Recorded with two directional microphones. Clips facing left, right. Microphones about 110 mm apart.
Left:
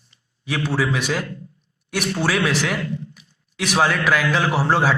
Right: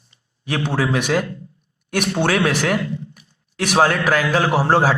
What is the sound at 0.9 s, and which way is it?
Speech, 55° right (ahead or behind).